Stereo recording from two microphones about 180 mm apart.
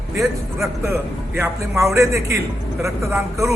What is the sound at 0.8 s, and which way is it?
A man's voice, 15° right (ahead or behind).